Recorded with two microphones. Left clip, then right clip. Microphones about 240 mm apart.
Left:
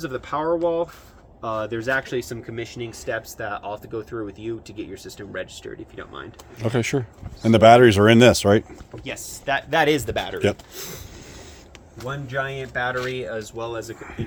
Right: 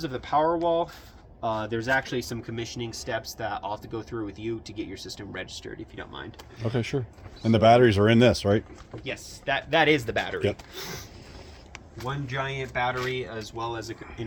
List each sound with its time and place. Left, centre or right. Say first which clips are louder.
0.0 s speech: right 1 dB; centre
6.6 s speech: left 6 dB; left
9.0 s speech: left 4 dB; left
10.8 s speech: left 1 dB; centre
12.0 s speech: left 4 dB; centre
13.0 s speech: left 4 dB; centre